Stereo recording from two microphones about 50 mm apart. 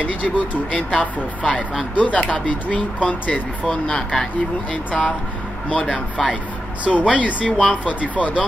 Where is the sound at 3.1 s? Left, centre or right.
Left.